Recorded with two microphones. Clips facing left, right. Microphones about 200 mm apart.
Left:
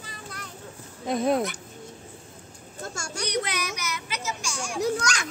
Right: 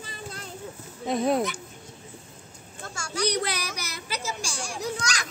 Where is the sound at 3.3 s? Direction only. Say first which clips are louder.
Left 1 dB; 35° right (ahead or behind).